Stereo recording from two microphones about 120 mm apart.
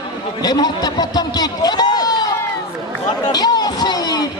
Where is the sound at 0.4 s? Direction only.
35° left (ahead or behind).